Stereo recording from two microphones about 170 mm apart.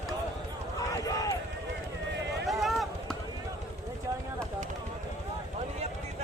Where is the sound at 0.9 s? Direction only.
20° left (ahead or behind).